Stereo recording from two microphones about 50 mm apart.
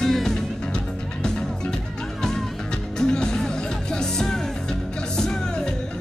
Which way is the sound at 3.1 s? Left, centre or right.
Centre.